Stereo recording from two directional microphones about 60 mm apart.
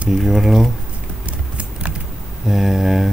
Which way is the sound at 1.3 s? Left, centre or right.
Right.